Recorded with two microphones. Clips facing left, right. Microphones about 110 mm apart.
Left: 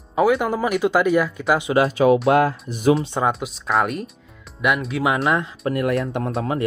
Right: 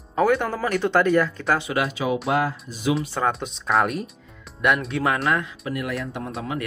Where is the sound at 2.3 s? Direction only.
60° left (ahead or behind).